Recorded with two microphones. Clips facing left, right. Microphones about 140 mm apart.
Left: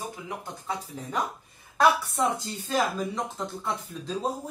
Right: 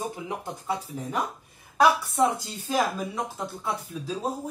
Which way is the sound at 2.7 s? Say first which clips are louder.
Right 1 dB; 10° right (ahead or behind).